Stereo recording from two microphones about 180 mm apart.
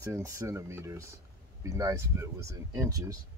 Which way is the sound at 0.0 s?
15° right (ahead or behind).